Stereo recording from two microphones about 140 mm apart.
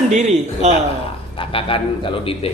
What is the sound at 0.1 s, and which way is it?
Speech, 50° right (ahead or behind).